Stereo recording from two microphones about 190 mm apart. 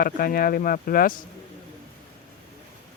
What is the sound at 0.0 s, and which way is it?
Speech, 50° left (ahead or behind).